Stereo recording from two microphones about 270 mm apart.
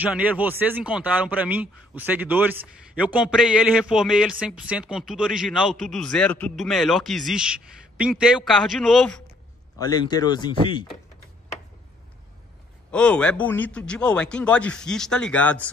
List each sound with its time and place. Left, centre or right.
0.0 s a man's voice: centre
9.8 s speech: centre
12.9 s a man's voice: centre